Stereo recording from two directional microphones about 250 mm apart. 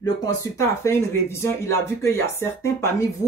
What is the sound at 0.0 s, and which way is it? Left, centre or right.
Speech, centre.